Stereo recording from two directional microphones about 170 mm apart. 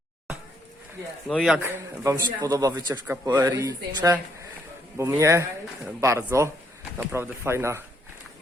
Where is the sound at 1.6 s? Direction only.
15° right (ahead or behind).